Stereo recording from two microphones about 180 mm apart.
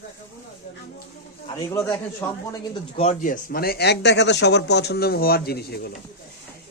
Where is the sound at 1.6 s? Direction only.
15° left (ahead or behind).